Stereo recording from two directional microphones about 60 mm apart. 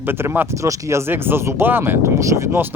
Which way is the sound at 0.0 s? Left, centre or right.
Right.